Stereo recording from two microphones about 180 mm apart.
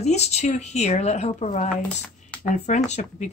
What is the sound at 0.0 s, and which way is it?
Speech, 35° left (ahead or behind).